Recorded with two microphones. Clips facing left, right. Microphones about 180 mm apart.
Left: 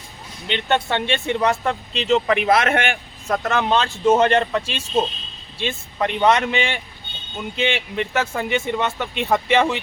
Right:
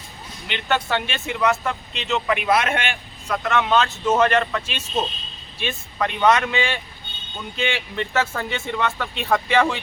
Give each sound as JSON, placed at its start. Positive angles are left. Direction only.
{"t": 0.4, "sound": "speech", "side_deg": 25}
{"t": 2.6, "sound": "speech", "side_deg": 50}